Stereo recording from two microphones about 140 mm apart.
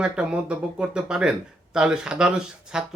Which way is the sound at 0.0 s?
5° right (ahead or behind).